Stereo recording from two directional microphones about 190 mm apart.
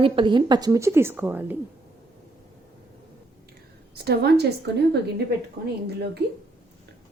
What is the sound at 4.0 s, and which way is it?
Speech, 55° right (ahead or behind).